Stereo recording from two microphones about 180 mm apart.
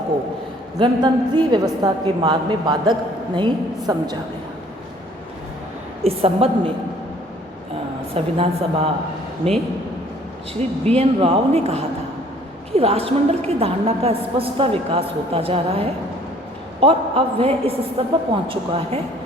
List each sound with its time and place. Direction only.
0.8 s a woman's voice: 25° right (ahead or behind)
6.0 s a woman's voice: 35° right (ahead or behind)
8.1 s a woman's voice: 30° right (ahead or behind)
10.5 s a woman's voice: 35° right (ahead or behind)